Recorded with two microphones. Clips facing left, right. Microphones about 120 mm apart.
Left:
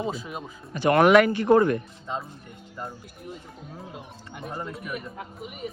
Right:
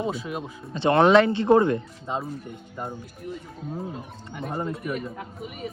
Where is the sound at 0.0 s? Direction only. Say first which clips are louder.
Right 2 dB; centre (ahead or behind).